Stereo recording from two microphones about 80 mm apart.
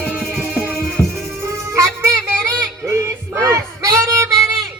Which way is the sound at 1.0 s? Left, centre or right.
Left.